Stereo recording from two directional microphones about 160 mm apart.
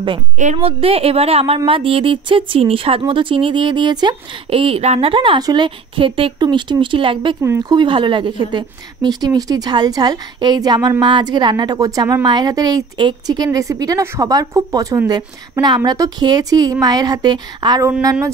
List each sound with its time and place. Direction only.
0.4 s a woman's voice: 40° right (ahead or behind); by 17.9 s 25° right (ahead or behind)